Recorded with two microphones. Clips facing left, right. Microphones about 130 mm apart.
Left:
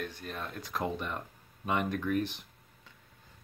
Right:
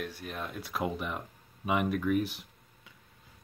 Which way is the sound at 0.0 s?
5° right (ahead or behind).